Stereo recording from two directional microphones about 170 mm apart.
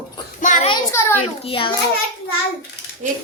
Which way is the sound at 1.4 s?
30° left (ahead or behind).